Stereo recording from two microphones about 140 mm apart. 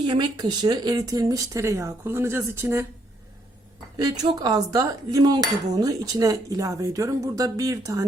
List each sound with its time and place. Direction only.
0.1 s speech: 30° right (ahead or behind)
3.9 s speech: 30° right (ahead or behind)